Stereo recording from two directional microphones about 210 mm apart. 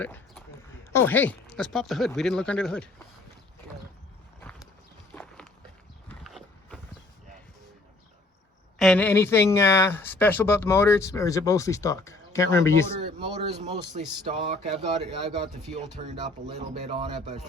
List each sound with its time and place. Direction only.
0.0 s a sound: 5° left (ahead or behind)
0.9 s speech: 10° left (ahead or behind)
4.4 s clip-clop: 5° left (ahead or behind)
5.1 s walk: 10° left (ahead or behind)
6.1 s a sound: 5° left (ahead or behind)
8.8 s speech: 5° left (ahead or behind)
13.1 s speech: 25° right (ahead or behind)
16.0 s speech: 35° right (ahead or behind)